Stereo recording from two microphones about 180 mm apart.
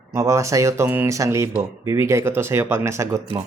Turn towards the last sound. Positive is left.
turn(degrees=-15)  # may be behind; listen again after turning